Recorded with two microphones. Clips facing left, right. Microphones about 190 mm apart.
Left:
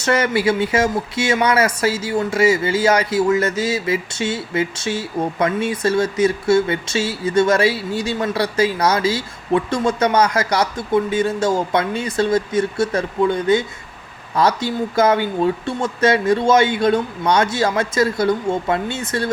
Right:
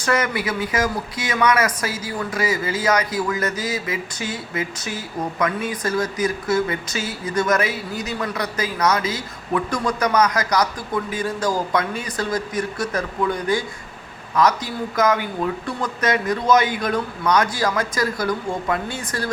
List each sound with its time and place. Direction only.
0.0 s speech: 30° left (ahead or behind)